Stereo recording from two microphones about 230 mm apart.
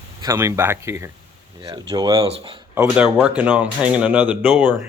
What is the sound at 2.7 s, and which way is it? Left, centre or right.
Speech, centre.